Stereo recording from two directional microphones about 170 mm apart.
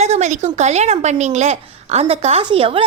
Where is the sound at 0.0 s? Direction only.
40° right (ahead or behind).